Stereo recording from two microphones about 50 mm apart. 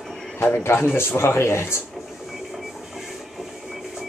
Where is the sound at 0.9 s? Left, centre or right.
Left.